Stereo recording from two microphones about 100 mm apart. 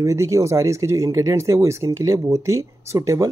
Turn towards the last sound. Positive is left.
turn(degrees=-30)  # may be behind; listen again after turning